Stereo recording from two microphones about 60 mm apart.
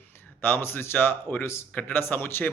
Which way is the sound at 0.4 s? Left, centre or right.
Left.